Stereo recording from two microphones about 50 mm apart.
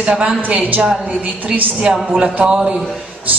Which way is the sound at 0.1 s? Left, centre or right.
Centre.